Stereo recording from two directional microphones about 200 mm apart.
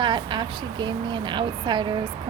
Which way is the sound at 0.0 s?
25° right (ahead or behind).